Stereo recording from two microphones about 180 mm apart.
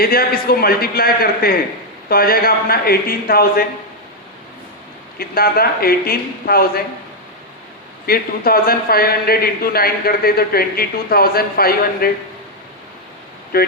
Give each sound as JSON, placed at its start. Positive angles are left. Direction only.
{"t": 0.0, "sound": "a man's voice", "side_deg": 55}
{"t": 5.1, "sound": "a man's voice", "side_deg": 55}
{"t": 8.0, "sound": "a man's voice", "side_deg": 55}
{"t": 13.5, "sound": "a man's voice", "side_deg": 55}